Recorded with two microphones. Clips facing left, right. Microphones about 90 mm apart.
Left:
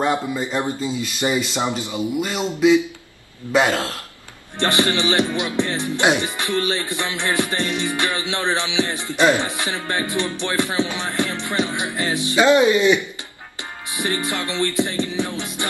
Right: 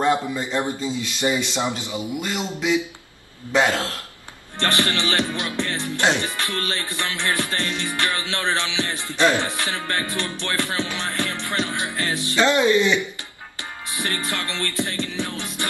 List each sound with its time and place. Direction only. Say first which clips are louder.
0.0 s speech: even; 15° left (ahead or behind)
13.6 s music: left 2 dB; 20° left (ahead or behind)